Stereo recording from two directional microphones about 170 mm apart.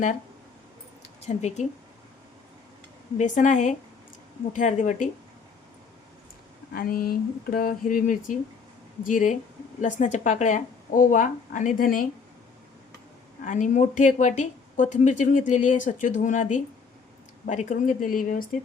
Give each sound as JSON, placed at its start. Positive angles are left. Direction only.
{"t": 1.4, "sound": "speech", "side_deg": 40}
{"t": 3.2, "sound": "speech", "side_deg": 45}
{"t": 6.7, "sound": "speech", "side_deg": 60}
{"t": 13.4, "sound": "speech", "side_deg": 50}